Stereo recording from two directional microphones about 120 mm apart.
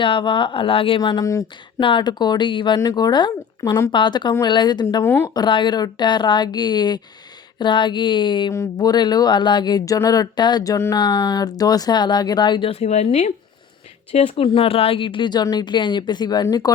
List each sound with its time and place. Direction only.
0.0 s speech: 45° left (ahead or behind)
1.2 s speech: 25° left (ahead or behind)
1.8 s speech: 40° left (ahead or behind)
5.0 s speech: 20° left (ahead or behind)
5.3 s speech: 40° left (ahead or behind)
10.9 s speech: 40° left (ahead or behind)
12.7 s speech: 65° left (ahead or behind)
14.1 s speech: 55° left (ahead or behind); by 16.7 s 30° left (ahead or behind)